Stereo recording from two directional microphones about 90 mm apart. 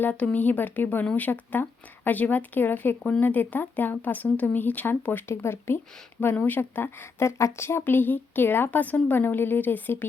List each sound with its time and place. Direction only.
0.0 s speech: 15° left (ahead or behind)